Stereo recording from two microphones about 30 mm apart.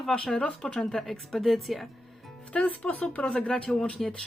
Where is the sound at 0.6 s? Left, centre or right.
Centre.